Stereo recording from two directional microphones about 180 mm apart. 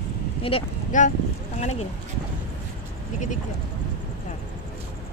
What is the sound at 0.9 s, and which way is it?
Speech, 45° left (ahead or behind).